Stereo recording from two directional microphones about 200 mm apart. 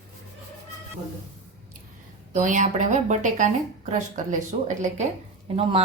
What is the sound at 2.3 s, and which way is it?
A woman's voice, 40° right (ahead or behind).